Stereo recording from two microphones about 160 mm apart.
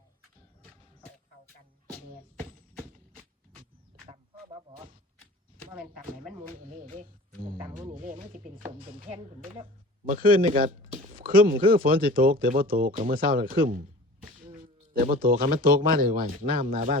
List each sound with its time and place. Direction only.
4.0 s honk: 30° right (ahead or behind)
6.6 s speech: 60° right (ahead or behind)
7.9 s speech: 35° right (ahead or behind)
9.4 s speech: 30° right (ahead or behind)
10.1 s speech: 65° right (ahead or behind)
11.0 s a sound: 65° right (ahead or behind)
11.7 s speech: 65° right (ahead or behind)